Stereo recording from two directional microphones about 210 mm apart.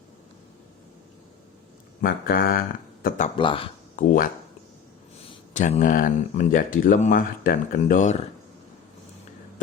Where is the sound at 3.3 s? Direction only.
25° left (ahead or behind).